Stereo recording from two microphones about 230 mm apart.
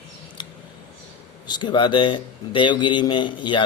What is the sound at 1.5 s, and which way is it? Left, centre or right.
A man's voice, centre.